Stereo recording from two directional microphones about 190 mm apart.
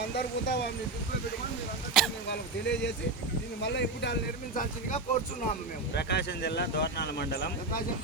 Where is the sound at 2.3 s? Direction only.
65° left (ahead or behind).